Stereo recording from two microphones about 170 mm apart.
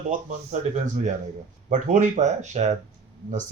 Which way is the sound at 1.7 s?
45° right (ahead or behind).